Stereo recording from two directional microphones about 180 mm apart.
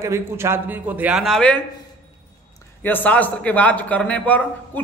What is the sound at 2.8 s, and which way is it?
A man's voice, 10° left (ahead or behind).